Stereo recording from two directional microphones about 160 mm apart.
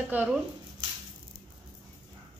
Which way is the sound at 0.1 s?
10° right (ahead or behind).